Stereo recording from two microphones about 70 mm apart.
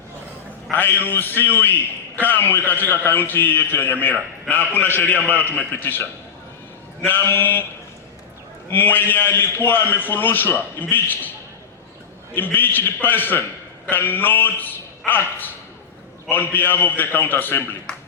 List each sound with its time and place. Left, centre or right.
0.7 s a man's voice: left
8.7 s a man's voice: left
12.3 s a man's voice: left